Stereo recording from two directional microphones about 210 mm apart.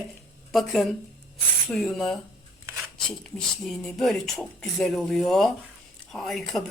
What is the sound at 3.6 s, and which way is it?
Speech, centre (ahead or behind).